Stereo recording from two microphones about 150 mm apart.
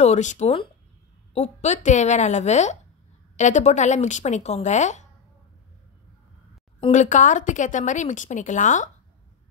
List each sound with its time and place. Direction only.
0.0 s speech: 50° left (ahead or behind)
6.9 s a woman's voice: 55° left (ahead or behind)